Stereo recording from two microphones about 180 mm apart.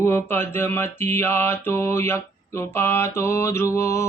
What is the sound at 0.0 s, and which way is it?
Mantra, 15° left (ahead or behind).